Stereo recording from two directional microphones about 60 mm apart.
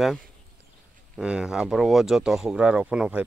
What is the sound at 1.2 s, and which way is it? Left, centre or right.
Speech, centre.